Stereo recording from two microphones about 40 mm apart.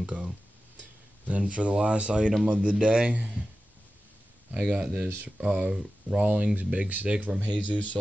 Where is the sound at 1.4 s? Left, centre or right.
Right.